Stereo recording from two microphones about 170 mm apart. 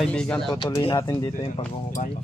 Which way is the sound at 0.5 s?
30° left (ahead or behind).